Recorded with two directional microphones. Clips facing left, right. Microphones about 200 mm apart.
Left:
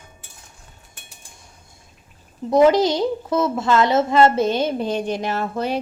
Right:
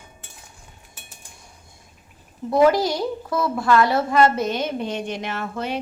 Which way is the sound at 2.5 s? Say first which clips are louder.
Left 3 dB; 20° left (ahead or behind).